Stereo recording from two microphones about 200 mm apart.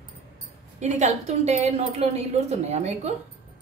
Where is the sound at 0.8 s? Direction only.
35° right (ahead or behind).